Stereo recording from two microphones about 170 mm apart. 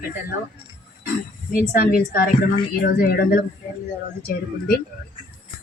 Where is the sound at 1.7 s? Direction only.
60° left (ahead or behind).